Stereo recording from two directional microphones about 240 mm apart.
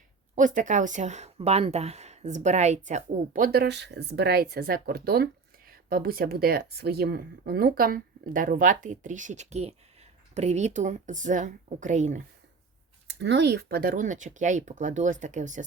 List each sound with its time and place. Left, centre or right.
0.3 s speech: right
13.1 s speech: right